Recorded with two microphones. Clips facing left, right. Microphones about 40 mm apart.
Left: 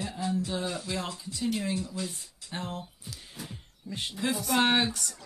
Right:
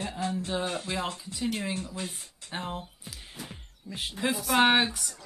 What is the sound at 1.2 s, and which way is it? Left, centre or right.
Speech, right.